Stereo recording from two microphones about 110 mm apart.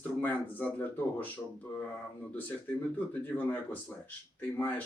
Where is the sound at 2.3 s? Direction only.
15° left (ahead or behind).